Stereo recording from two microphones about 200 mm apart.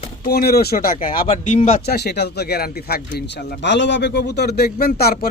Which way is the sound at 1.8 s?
55° left (ahead or behind).